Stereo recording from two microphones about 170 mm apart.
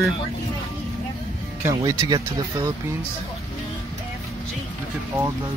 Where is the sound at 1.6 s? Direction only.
20° right (ahead or behind).